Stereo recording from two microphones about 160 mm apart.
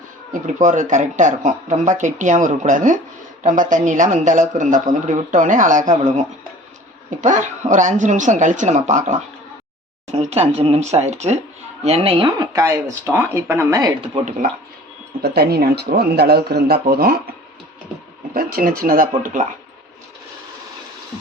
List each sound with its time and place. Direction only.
0.4 s speech: 50° right (ahead or behind); by 13.9 s 20° right (ahead or behind)
14.3 s speech: 55° right (ahead or behind)
15.2 s speech: 80° right
18.3 s speech: 65° right (ahead or behind)